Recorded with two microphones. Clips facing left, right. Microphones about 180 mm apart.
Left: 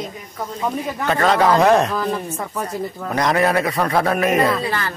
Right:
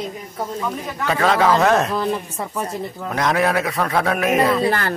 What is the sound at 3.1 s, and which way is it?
A man's voice, centre (ahead or behind).